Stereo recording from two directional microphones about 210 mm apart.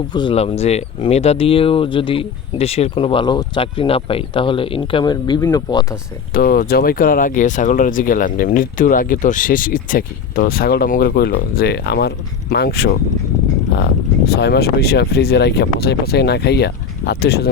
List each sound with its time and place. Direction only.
0.1 s speech: 20° left (ahead or behind)
6.3 s speech: 45° left (ahead or behind)